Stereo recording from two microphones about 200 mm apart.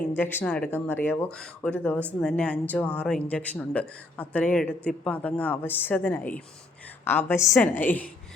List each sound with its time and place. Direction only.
0.2 s speech: 10° left (ahead or behind)